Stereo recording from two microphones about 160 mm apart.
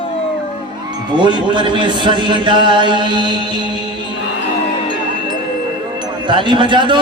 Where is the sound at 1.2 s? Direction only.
30° right (ahead or behind).